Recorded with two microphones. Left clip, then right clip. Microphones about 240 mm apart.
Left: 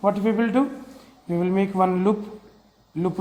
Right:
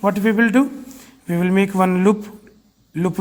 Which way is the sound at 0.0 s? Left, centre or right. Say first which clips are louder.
Right 4 dB; right.